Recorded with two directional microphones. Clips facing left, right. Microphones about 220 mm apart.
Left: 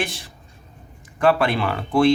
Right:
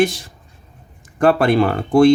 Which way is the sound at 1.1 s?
45° right (ahead or behind).